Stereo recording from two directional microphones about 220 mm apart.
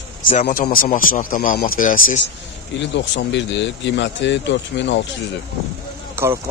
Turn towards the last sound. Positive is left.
turn(degrees=-10)  # may be behind; listen again after turning